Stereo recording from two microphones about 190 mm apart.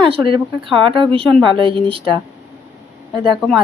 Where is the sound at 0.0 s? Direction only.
25° right (ahead or behind).